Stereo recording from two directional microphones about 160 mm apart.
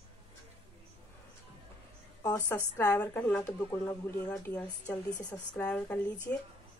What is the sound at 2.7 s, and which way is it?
Speech, 10° left (ahead or behind).